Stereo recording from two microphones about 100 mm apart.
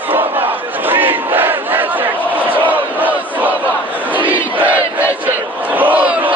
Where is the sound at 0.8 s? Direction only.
20° right (ahead or behind).